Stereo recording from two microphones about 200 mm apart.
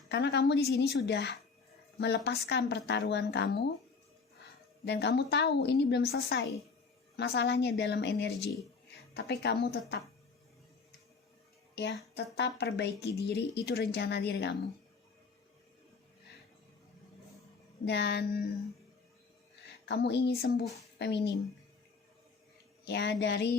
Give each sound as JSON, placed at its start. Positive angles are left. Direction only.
{"t": 0.1, "sound": "speech", "side_deg": 60}
{"t": 4.9, "sound": "speech", "side_deg": 55}
{"t": 11.7, "sound": "a woman's voice", "side_deg": 60}
{"t": 17.8, "sound": "speech", "side_deg": 55}
{"t": 19.8, "sound": "speech", "side_deg": 60}
{"t": 22.9, "sound": "speech", "side_deg": 60}